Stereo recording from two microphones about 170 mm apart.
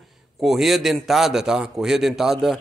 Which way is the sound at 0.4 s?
Centre (ahead or behind).